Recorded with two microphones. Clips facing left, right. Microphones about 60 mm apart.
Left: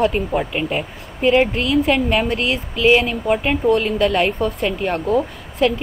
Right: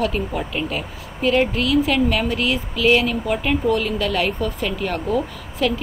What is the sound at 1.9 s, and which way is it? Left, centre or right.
A woman's voice, left.